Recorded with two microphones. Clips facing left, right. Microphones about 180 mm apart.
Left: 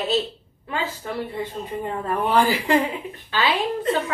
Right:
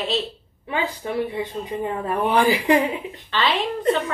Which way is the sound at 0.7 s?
15° right (ahead or behind).